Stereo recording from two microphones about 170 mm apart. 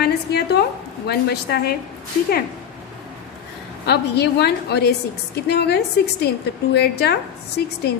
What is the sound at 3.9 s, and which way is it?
A woman's voice, 75° left (ahead or behind).